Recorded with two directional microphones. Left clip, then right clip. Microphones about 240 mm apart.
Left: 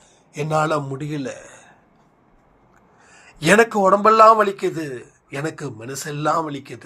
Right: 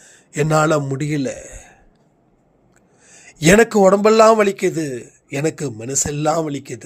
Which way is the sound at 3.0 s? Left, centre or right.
Right.